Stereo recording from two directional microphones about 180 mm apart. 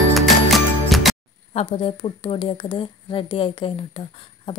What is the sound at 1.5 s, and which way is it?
A woman's voice, 35° left (ahead or behind).